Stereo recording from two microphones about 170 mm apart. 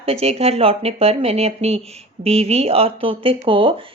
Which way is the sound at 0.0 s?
35° right (ahead or behind).